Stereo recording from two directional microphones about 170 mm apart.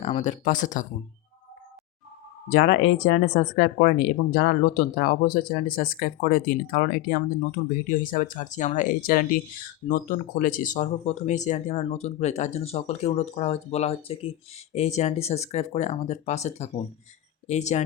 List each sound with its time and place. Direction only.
0.0 s speech: 40° left (ahead or behind)
2.5 s speech: 65° left (ahead or behind); by 17.8 s 40° left (ahead or behind)